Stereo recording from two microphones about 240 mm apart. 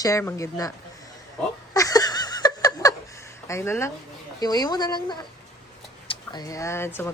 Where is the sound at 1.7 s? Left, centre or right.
Centre.